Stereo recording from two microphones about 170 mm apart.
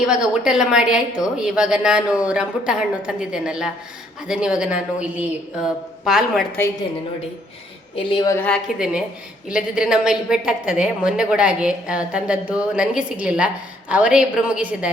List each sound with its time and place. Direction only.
0.0 s a woman's voice: 5° right (ahead or behind)
7.9 s a woman's voice: 25° left (ahead or behind)
8.8 s a woman's voice: 5° right (ahead or behind)